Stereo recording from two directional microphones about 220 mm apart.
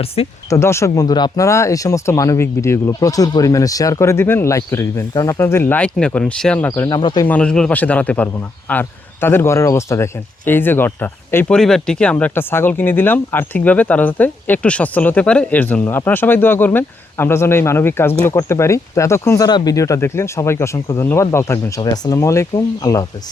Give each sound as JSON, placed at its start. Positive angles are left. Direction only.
{"t": 0.2, "sound": "speech", "side_deg": 25}
{"t": 0.5, "sound": "speech", "side_deg": 10}
{"t": 7.3, "sound": "speech", "side_deg": 5}